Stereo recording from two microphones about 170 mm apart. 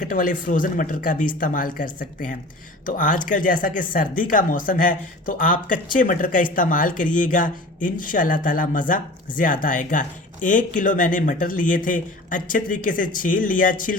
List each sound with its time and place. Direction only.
0.0 s speech: 55° left (ahead or behind)